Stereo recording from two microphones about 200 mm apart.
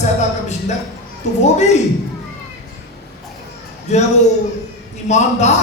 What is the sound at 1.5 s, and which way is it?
Speech, 35° left (ahead or behind).